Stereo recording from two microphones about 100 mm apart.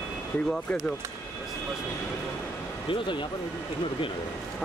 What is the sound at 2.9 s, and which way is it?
Speech, 55° left (ahead or behind).